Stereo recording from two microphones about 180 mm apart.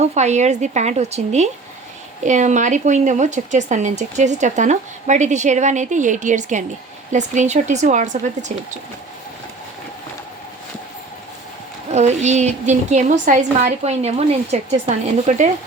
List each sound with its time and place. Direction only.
0.0 s a woman's voice: 40° right (ahead or behind)
11.9 s a woman's voice: 40° right (ahead or behind)